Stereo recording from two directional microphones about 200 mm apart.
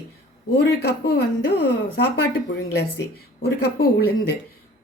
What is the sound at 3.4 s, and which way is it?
Speech, 50° left (ahead or behind).